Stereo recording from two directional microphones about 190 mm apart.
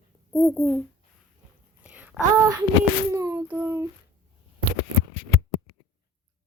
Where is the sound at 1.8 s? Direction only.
5° right (ahead or behind).